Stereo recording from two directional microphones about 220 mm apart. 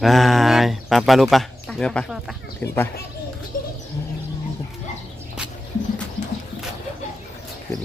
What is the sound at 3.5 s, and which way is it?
Bird, 40° left (ahead or behind).